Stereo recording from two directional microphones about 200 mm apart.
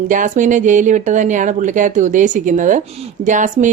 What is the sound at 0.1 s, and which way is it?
A woman's voice, 40° right (ahead or behind).